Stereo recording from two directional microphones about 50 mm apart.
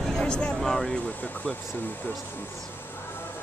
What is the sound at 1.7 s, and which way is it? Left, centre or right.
Speech, left.